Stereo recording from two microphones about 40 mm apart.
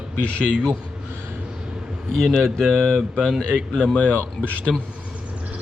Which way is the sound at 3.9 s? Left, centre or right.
Left.